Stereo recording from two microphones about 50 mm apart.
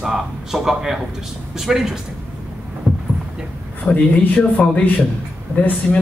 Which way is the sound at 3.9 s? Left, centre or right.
Left.